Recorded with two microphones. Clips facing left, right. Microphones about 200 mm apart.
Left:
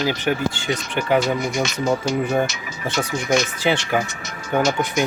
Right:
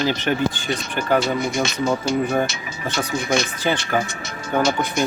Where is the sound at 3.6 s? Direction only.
10° left (ahead or behind).